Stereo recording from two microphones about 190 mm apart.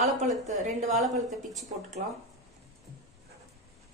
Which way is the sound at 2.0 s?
45° right (ahead or behind).